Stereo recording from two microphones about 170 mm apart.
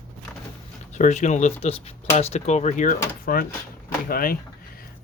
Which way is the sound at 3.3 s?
55° left (ahead or behind).